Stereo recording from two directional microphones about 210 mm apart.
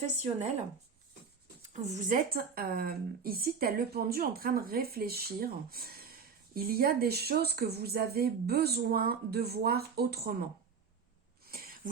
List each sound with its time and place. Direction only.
0.0 s speech: 35° right (ahead or behind)
1.7 s speech: 35° right (ahead or behind)
11.4 s a sound: 45° right (ahead or behind)